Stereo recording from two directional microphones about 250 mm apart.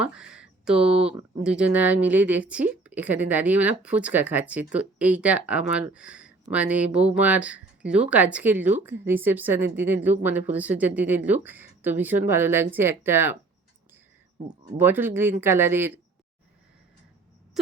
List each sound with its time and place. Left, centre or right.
0.0 s a woman's voice: centre
14.8 s a woman's voice: centre